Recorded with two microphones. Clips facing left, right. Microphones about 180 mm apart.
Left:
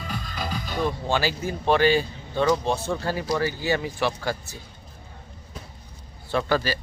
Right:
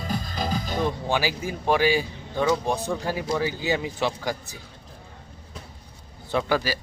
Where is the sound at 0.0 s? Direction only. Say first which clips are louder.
Right 3 dB; 40° right (ahead or behind).